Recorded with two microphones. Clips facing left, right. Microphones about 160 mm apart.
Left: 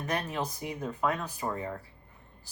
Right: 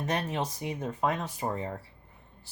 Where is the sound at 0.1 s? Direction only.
25° right (ahead or behind).